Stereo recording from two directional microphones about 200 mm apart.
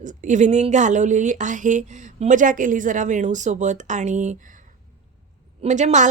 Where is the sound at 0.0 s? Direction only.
40° right (ahead or behind).